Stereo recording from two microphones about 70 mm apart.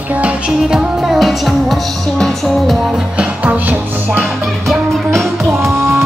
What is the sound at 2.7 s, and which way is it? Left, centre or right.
Music, centre.